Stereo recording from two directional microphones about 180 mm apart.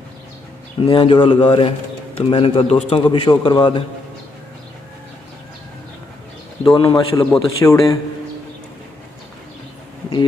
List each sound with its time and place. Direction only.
0.7 s a man's voice: 30° left (ahead or behind)
6.6 s a man's voice: 25° left (ahead or behind)